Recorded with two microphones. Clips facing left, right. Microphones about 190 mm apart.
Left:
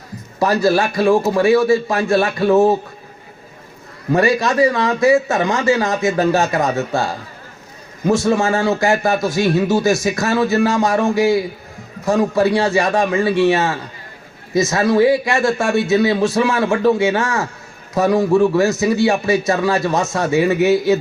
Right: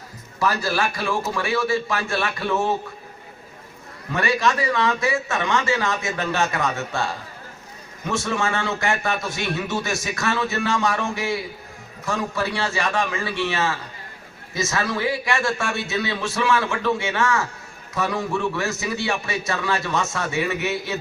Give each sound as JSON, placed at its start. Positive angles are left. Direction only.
{"t": 0.3, "sound": "a man's voice", "side_deg": 40}
{"t": 4.1, "sound": "a man's voice", "side_deg": 35}